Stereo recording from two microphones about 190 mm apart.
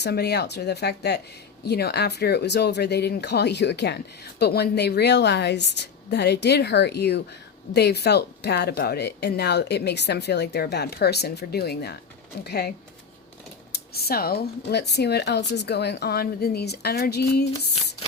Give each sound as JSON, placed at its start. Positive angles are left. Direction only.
{"t": 0.0, "sound": "speech", "side_deg": 60}
{"t": 13.7, "sound": "speech", "side_deg": 55}